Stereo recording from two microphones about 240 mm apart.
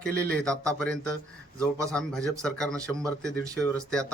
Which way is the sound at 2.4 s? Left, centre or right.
Centre.